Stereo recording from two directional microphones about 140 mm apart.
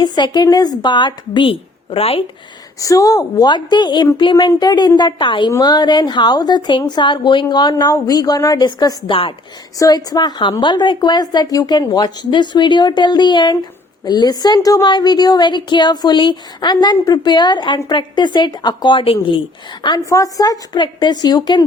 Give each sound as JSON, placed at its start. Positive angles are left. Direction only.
{"t": 0.0, "sound": "a woman's voice", "side_deg": 30}
{"t": 2.8, "sound": "a woman's voice", "side_deg": 25}
{"t": 20.1, "sound": "a woman's voice", "side_deg": 25}